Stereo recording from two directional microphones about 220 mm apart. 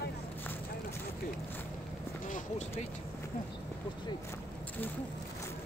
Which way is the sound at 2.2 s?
35° left (ahead or behind).